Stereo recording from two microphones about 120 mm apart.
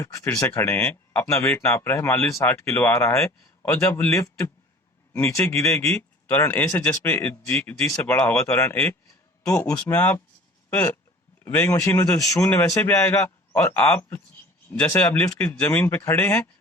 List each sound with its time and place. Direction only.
0.0 s speech: 20° left (ahead or behind)
9.5 s speech: 10° left (ahead or behind)
11.7 s speech: 25° left (ahead or behind)